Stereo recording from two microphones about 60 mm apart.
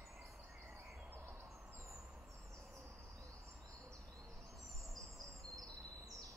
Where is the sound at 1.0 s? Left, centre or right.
Right.